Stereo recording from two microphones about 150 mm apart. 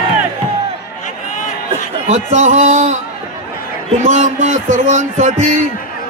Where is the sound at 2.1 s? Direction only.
55° right (ahead or behind).